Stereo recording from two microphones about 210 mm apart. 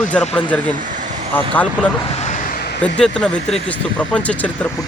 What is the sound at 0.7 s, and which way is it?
Vehicle, 40° right (ahead or behind).